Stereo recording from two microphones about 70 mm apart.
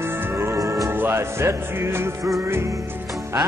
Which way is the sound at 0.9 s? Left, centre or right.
Right.